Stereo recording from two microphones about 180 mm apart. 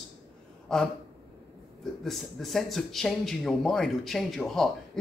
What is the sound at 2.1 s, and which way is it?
Speech, centre (ahead or behind).